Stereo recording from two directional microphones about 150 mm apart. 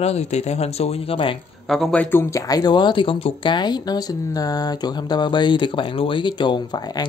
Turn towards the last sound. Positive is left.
turn(degrees=30)  # may be behind; listen again after turning